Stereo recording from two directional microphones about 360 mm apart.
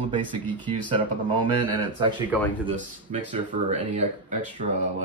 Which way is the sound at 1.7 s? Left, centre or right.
Centre.